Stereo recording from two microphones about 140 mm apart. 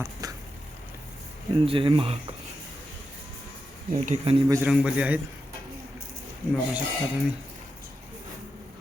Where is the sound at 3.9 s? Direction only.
55° right (ahead or behind).